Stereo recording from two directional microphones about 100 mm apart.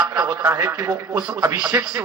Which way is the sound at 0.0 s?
35° right (ahead or behind).